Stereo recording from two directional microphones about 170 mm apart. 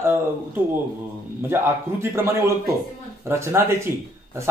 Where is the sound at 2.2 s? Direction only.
15° right (ahead or behind).